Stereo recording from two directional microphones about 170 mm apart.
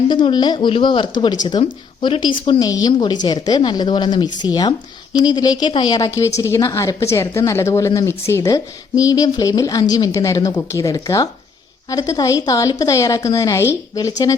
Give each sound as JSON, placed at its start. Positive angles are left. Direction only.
{"t": 0.1, "sound": "a woman's voice", "side_deg": 30}